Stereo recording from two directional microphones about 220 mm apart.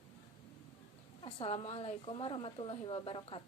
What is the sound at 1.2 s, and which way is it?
A woman's voice, 25° left (ahead or behind).